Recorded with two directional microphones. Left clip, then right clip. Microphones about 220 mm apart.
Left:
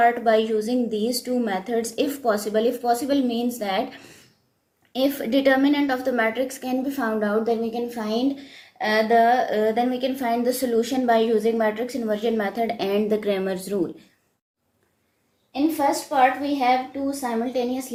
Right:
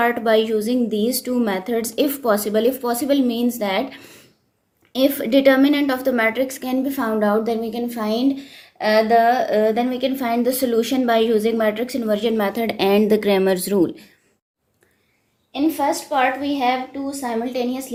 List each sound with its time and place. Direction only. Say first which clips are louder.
0.0 s a woman's voice: right 1 dB; 50° right (ahead or behind)
15.5 s a woman's voice: right 2 dB; 40° right (ahead or behind)